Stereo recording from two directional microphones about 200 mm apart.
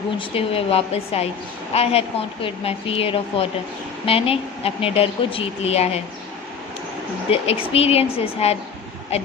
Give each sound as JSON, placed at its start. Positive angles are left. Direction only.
{"t": 0.2, "sound": "a woman's voice", "side_deg": 30}
{"t": 7.3, "sound": "a woman's voice", "side_deg": 30}